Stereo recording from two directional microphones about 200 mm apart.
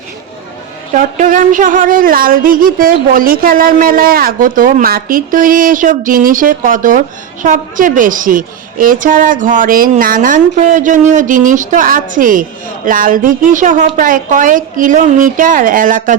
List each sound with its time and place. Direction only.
0.9 s a woman's voice: 40° right (ahead or behind)